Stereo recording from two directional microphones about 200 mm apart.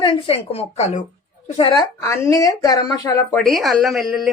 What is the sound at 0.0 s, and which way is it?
Speech, 25° left (ahead or behind).